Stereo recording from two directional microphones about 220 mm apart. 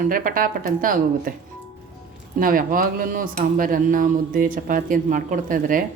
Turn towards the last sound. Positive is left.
turn(degrees=-40)  # may be behind; listen again after turning